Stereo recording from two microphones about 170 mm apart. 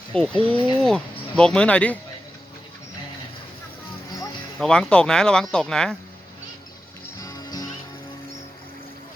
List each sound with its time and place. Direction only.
0.1 s speech: 5° left (ahead or behind)
0.5 s speech: 30° left (ahead or behind)
0.8 s speech: 5° left (ahead or behind)
4.6 s speech: 5° left (ahead or behind)
7.2 s music: 20° left (ahead or behind)